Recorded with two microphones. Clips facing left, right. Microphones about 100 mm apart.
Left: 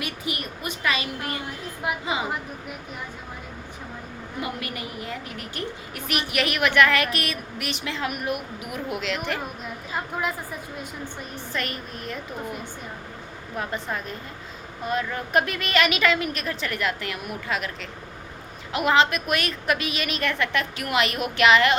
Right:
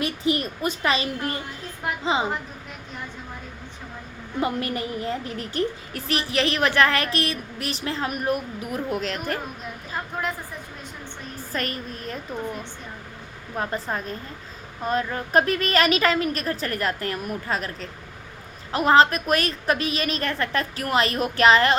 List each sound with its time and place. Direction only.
0.0 s a woman's voice: 30° right (ahead or behind)
4.4 s a woman's voice: 35° right (ahead or behind)
9.9 s a woman's voice: 5° left (ahead or behind)
11.5 s a woman's voice: 40° right (ahead or behind)
13.6 s a woman's voice: 35° right (ahead or behind)